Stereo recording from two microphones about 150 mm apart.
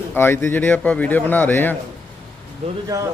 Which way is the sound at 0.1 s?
15° left (ahead or behind).